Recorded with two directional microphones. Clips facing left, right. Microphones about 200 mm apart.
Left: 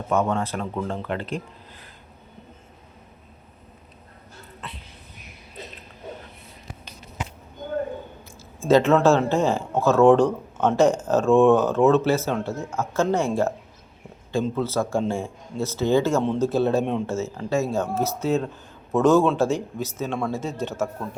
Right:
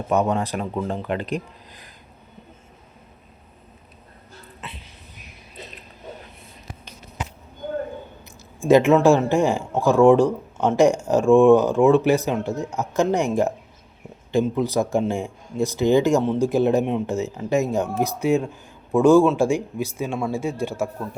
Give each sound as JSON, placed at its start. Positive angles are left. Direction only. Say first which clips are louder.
{"t": 0.1, "sound": "speech", "louder": "right 2 dB", "side_deg": -15}
{"t": 8.6, "sound": "speech", "louder": "right 2 dB", "side_deg": -15}